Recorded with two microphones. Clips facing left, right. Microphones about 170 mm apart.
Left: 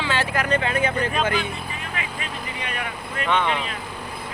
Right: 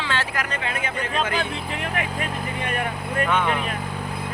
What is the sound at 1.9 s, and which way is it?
Vehicle, 50° right (ahead or behind).